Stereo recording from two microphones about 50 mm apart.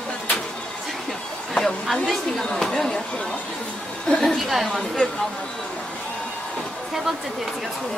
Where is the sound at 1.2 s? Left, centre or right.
Centre.